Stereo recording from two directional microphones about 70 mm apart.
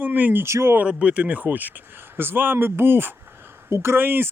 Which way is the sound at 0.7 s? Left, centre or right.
Centre.